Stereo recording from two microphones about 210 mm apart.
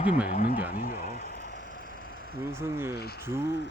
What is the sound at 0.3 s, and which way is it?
Speech, 45° left (ahead or behind).